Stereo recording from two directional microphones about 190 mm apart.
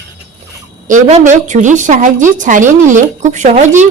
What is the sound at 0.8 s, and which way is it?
A woman's voice, 40° right (ahead or behind).